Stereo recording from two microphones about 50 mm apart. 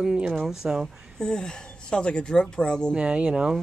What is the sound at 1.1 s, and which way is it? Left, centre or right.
Speech, centre.